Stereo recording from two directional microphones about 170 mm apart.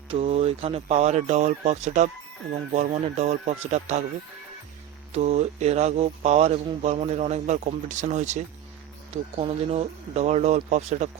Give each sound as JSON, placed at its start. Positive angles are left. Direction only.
{"t": 0.1, "sound": "speech", "side_deg": -35}
{"t": 5.1, "sound": "speech", "side_deg": -40}